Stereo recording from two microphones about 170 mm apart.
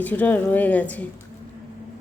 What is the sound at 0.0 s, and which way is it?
A woman's voice, 10° left (ahead or behind).